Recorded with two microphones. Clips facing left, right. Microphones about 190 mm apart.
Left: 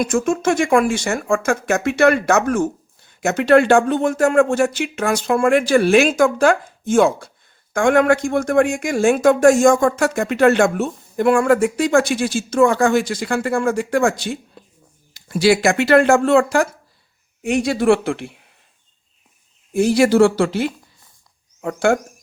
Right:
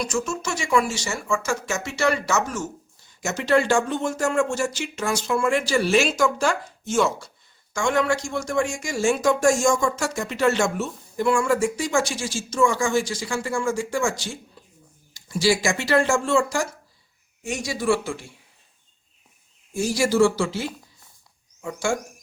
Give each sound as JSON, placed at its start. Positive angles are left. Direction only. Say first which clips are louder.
{"t": 0.0, "sound": "speech", "louder": "left 9 dB", "side_deg": 55}
{"t": 19.7, "sound": "speech", "louder": "left 8 dB", "side_deg": 60}